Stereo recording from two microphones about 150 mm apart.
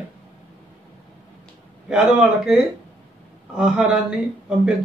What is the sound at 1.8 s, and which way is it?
Speech, 5° right (ahead or behind).